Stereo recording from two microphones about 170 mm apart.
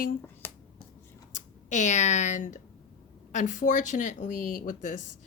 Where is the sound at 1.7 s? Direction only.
45° left (ahead or behind).